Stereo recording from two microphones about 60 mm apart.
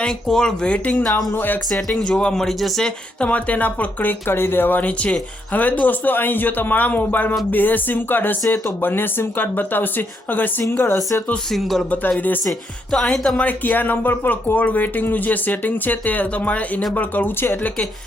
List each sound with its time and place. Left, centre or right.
0.0 s speech: centre
1.3 s speech: left
1.7 s speech: centre
2.8 s speech: centre
4.3 s speech: left
4.8 s speech: left
10.8 s speech: left
11.5 s speech: centre
13.4 s speech: left